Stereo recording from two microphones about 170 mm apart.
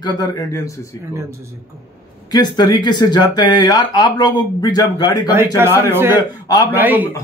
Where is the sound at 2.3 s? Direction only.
25° left (ahead or behind).